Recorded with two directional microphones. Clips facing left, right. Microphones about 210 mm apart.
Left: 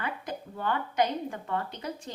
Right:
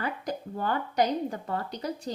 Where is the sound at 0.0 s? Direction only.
40° right (ahead or behind).